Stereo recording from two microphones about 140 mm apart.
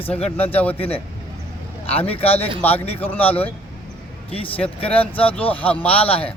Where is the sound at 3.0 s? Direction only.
15° left (ahead or behind).